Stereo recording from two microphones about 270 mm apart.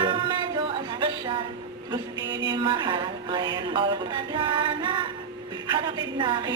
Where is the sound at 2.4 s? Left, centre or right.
Centre.